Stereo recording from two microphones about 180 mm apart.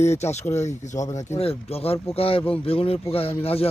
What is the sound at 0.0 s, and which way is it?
Speech, 40° left (ahead or behind).